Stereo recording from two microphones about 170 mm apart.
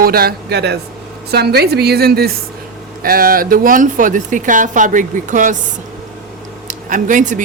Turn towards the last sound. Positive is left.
turn(degrees=-50)  # may be behind; listen again after turning